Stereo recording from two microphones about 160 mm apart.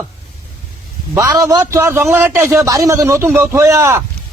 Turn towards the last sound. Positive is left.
turn(degrees=-15)  # may be behind; listen again after turning